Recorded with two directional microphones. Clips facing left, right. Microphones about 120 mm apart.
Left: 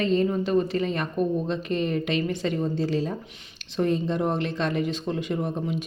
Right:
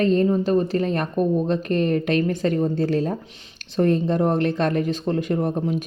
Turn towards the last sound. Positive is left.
turn(degrees=-45)  # may be behind; listen again after turning